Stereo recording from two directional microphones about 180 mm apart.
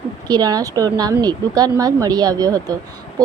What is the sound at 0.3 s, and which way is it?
Speech, 20° right (ahead or behind).